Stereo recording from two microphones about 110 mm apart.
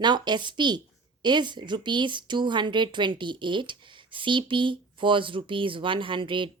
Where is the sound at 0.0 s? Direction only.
40° right (ahead or behind).